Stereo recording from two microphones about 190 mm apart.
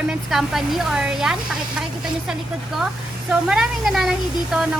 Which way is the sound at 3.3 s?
5° right (ahead or behind).